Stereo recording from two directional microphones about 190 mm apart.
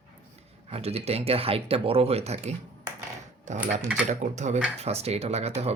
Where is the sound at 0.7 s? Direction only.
30° right (ahead or behind).